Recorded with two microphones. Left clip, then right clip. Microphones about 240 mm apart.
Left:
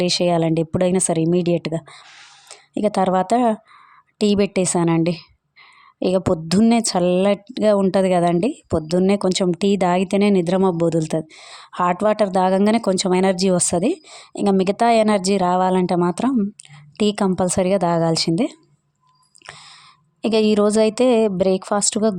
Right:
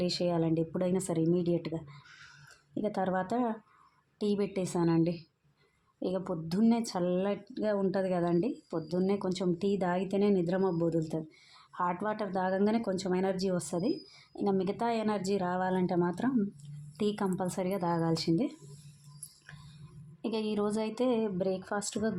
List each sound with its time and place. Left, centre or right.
0.0 s a woman's voice: left
19.5 s a sound: left
20.2 s a woman's voice: left